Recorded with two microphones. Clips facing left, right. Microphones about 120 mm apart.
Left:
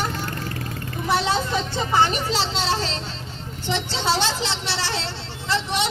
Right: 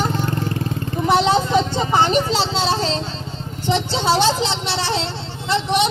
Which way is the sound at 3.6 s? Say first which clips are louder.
Right 5 dB; 15° right (ahead or behind).